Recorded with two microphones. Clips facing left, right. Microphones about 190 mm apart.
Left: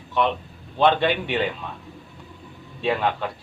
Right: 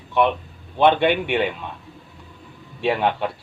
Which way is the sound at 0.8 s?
15° right (ahead or behind).